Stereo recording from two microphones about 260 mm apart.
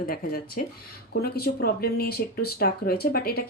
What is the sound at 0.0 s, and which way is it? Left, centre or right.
Speech, left.